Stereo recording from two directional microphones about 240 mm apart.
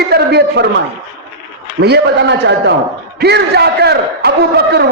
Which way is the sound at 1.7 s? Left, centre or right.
Right.